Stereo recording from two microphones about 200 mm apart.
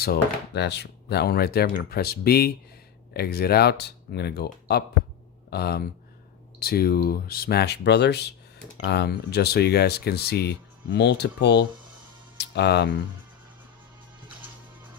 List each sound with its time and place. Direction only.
0.0 s speech: 55° left (ahead or behind)
5.5 s speech: 55° left (ahead or behind)